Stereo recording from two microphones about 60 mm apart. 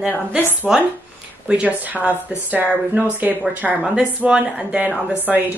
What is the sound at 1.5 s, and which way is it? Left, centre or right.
Speech, right.